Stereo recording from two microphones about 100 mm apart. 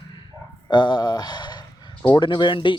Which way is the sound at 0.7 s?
45° left (ahead or behind).